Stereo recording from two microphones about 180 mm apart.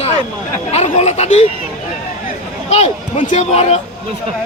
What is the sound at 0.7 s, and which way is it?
Speech, 35° left (ahead or behind).